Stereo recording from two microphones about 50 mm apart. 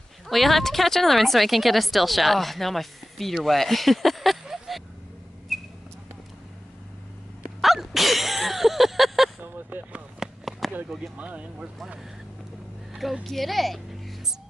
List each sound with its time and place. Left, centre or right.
0.3 s speech: centre
7.6 s sneeze: centre
9.4 s a sound: right
10.2 s a sound: centre
11.1 s speech: right
13.2 s speech: centre